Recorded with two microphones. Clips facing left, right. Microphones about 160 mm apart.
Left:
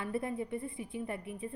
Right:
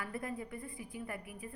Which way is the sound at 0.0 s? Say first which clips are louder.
Left 5 dB; 25° left (ahead or behind).